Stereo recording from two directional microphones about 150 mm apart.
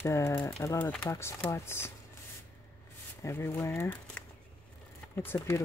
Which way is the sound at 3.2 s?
15° left (ahead or behind).